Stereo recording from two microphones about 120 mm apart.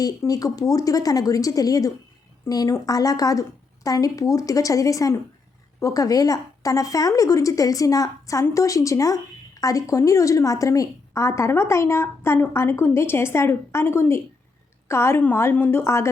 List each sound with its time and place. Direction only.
0.0 s a woman's voice: 30° left (ahead or behind)